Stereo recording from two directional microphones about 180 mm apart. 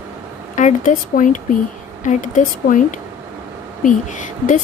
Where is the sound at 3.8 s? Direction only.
45° left (ahead or behind).